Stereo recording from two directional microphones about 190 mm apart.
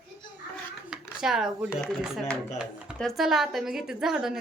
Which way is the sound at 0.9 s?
Centre (ahead or behind).